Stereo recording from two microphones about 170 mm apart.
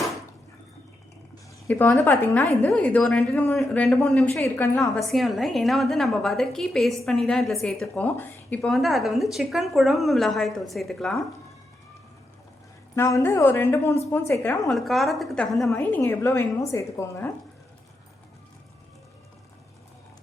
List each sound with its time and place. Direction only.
1.6 s a woman's voice: 10° left (ahead or behind)
4.9 s a woman's voice: centre (ahead or behind)
13.0 s a woman's voice: 15° left (ahead or behind)
14.7 s a woman's voice: centre (ahead or behind)
15.7 s a woman's voice: 10° left (ahead or behind)